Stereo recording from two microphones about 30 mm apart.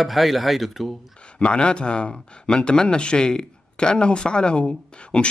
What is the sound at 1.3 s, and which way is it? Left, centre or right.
Speech, left.